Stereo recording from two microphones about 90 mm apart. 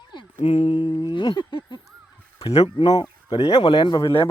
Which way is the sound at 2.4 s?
90° left.